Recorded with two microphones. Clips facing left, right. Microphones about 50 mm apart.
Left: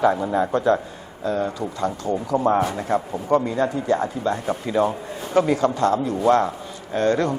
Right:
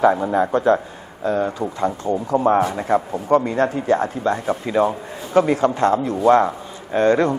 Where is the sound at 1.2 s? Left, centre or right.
Right.